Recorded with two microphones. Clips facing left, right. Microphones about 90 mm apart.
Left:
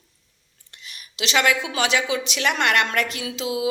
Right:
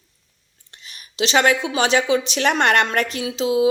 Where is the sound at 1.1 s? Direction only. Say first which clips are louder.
Right 4 dB; 30° right (ahead or behind).